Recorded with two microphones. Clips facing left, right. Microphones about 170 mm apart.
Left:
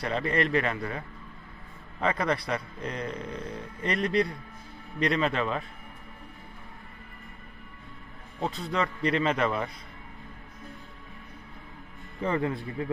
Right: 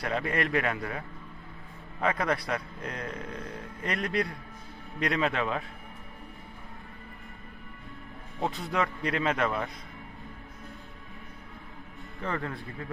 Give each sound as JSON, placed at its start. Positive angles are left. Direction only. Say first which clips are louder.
{"t": 0.0, "sound": "a man's voice", "louder": "left 2 dB", "side_deg": -5}
{"t": 8.4, "sound": "a man's voice", "louder": "even", "side_deg": -10}
{"t": 12.2, "sound": "a man's voice", "louder": "left 6 dB", "side_deg": 15}